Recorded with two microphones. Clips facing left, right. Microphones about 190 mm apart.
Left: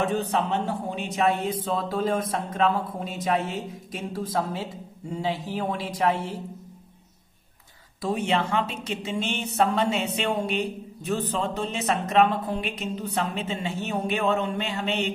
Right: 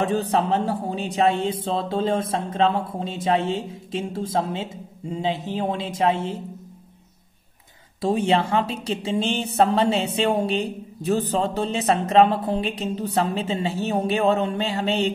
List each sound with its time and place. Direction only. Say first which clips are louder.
0.0 s speech: right 3 dB; 35° right (ahead or behind)
8.0 s a woman's voice: right 5 dB; 30° right (ahead or behind)